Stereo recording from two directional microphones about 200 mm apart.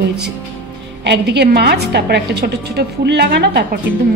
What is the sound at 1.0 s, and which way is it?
A woman's voice, 60° right (ahead or behind).